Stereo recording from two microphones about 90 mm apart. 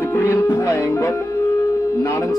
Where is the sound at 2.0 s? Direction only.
35° left (ahead or behind).